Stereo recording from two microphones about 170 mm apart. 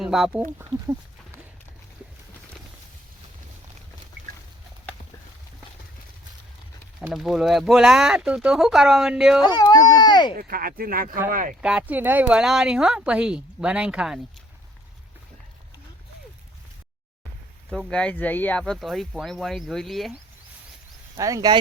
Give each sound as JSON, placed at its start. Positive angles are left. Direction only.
{"t": 0.0, "sound": "speech", "side_deg": 0}
{"t": 0.7, "sound": "speech", "side_deg": -30}
{"t": 7.1, "sound": "speech", "side_deg": 0}
{"t": 9.4, "sound": "baby cry", "side_deg": 25}
{"t": 10.3, "sound": "speech", "side_deg": -60}
{"t": 11.6, "sound": "speech", "side_deg": -10}
{"t": 17.7, "sound": "speech", "side_deg": 5}
{"t": 21.2, "sound": "speech", "side_deg": -20}